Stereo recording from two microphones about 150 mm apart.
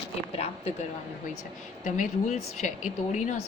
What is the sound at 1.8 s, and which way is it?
Speech, 55° left (ahead or behind).